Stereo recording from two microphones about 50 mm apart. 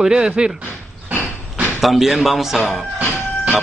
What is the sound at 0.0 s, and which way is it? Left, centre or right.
Speech, centre.